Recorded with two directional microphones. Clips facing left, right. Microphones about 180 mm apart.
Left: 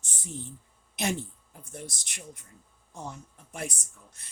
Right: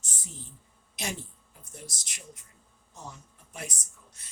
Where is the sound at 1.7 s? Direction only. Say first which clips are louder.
Left 5 dB; 55° left (ahead or behind).